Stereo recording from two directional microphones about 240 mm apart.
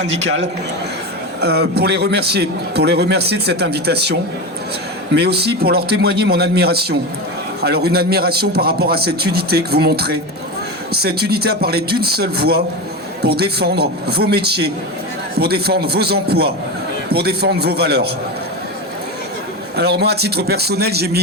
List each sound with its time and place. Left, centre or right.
0.0 s a man's voice: right
19.7 s a man's voice: right